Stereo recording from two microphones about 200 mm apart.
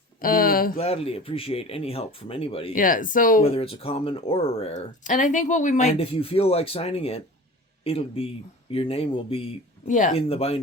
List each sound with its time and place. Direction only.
0.2 s a sound: 45° left (ahead or behind)
0.8 s speech: 30° left (ahead or behind)
2.7 s speech: 45° left (ahead or behind)
3.4 s speech: 30° left (ahead or behind)